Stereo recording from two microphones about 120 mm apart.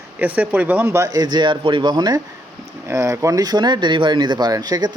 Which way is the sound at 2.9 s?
25° right (ahead or behind).